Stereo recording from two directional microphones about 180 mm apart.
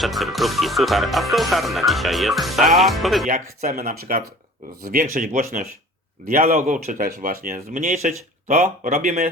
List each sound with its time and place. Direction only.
0.0 s speech: centre (ahead or behind)
3.6 s speech: 50° right (ahead or behind)